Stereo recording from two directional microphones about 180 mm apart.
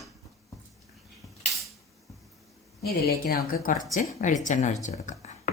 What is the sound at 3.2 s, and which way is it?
A woman's voice, 55° left (ahead or behind).